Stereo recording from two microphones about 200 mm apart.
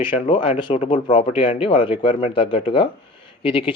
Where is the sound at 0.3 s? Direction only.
30° left (ahead or behind).